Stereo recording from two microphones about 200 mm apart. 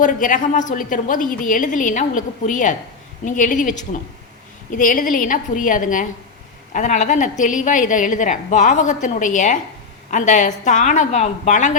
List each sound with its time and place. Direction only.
0.0 s a woman's voice: 40° left (ahead or behind)